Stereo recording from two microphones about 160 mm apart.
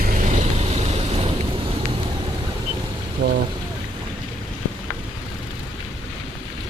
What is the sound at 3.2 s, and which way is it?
Speech, 60° right (ahead or behind).